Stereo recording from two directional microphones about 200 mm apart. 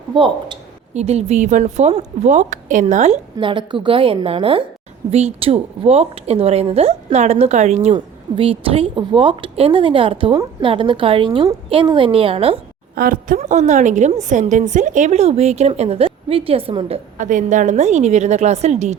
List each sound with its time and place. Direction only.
0.1 s speech: 25° right (ahead or behind)
0.9 s a woman's voice: 35° right (ahead or behind)
3.3 s a woman's voice: 25° right (ahead or behind)
13.0 s a woman's voice: 45° right (ahead or behind)